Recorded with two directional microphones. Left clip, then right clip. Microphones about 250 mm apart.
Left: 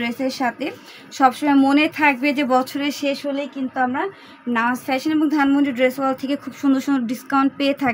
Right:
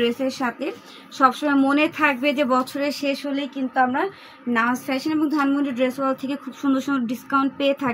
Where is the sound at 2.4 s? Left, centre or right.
Left.